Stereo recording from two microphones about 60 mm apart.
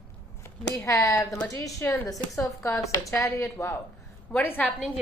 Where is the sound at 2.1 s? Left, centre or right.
Left.